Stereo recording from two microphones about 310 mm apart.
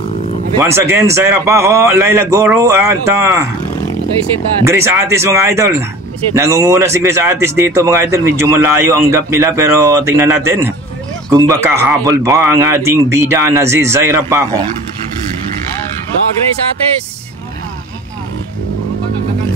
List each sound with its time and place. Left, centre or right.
0.6 s speech: centre
4.6 s speech: centre